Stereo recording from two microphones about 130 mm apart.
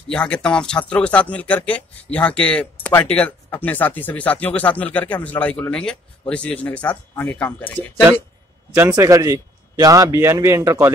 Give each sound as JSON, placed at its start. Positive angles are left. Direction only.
{"t": 0.1, "sound": "speech", "side_deg": 5}
{"t": 8.7, "sound": "a man's voice", "side_deg": -20}